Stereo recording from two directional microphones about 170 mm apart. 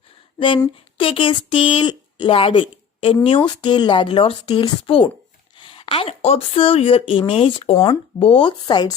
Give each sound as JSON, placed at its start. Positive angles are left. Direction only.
{"t": 0.6, "sound": "speech", "side_deg": 30}